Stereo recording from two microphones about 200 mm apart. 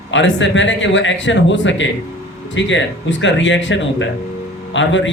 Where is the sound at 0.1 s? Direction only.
65° left (ahead or behind).